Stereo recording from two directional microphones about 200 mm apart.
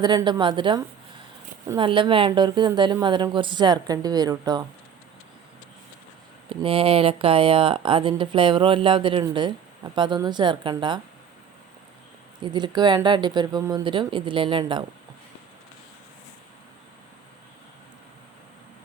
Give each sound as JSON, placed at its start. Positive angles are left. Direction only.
{"t": 0.0, "sound": "speech", "side_deg": -20}
{"t": 6.5, "sound": "speech", "side_deg": -25}
{"t": 12.4, "sound": "speech", "side_deg": -20}